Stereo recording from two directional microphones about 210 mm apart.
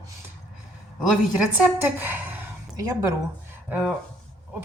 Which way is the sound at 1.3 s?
5° right (ahead or behind).